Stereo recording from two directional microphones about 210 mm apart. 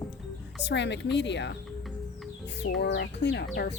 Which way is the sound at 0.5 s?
55° left (ahead or behind).